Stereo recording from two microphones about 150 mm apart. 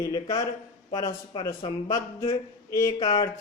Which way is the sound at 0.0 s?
25° left (ahead or behind).